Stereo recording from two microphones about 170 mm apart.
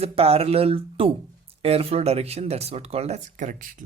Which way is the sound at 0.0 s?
35° right (ahead or behind).